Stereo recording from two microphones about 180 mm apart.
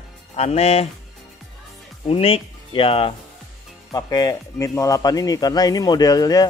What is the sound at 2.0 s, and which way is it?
Speech, 30° left (ahead or behind).